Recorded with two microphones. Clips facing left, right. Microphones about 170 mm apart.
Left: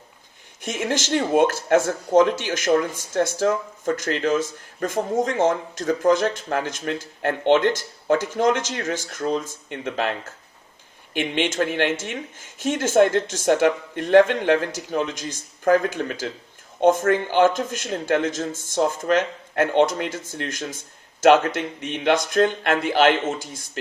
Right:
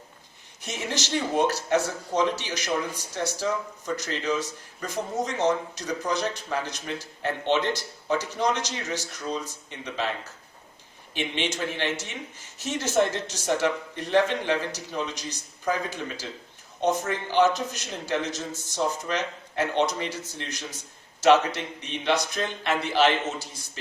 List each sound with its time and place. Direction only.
0.6 s speech: 50° left (ahead or behind)